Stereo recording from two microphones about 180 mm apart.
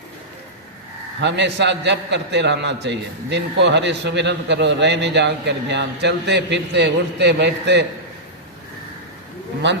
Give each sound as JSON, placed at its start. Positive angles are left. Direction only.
{"t": 1.2, "sound": "a man's voice", "side_deg": -75}
{"t": 9.6, "sound": "a man's voice", "side_deg": -75}